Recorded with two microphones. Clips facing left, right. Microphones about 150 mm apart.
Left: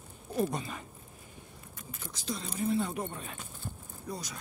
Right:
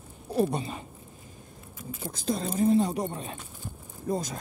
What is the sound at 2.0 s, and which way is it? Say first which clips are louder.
Speech: right 8 dB; 50° right (ahead or behind).